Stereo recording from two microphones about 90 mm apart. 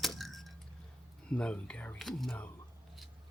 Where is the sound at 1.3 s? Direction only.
10° left (ahead or behind).